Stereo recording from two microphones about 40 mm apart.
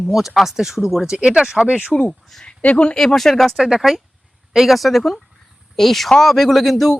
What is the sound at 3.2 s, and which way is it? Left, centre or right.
Speech, centre.